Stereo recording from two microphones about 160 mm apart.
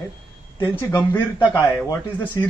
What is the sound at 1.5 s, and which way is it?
Speech, 15° left (ahead or behind).